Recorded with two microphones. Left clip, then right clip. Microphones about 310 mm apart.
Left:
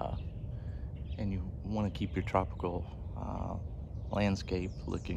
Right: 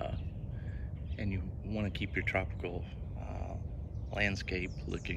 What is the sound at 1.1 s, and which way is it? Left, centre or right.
Speech, centre.